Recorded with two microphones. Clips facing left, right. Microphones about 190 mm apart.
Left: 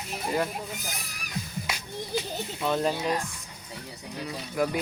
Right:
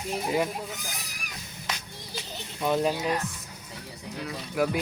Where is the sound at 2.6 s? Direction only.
10° right (ahead or behind).